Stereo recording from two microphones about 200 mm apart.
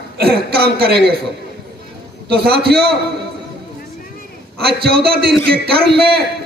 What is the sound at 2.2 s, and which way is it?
Speech, 50° right (ahead or behind).